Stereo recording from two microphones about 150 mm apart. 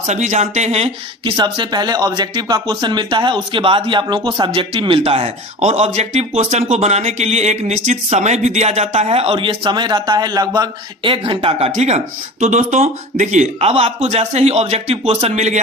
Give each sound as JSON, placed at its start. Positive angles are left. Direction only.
{"t": 0.1, "sound": "speech", "side_deg": -50}